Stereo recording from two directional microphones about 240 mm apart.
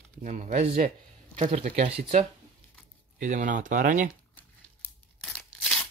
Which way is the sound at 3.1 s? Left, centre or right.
Right.